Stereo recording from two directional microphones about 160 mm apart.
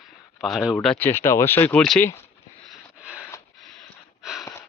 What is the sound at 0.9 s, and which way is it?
Speech, 15° left (ahead or behind).